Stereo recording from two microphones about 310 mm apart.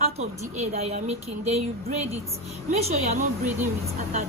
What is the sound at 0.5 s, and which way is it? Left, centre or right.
Speech, right.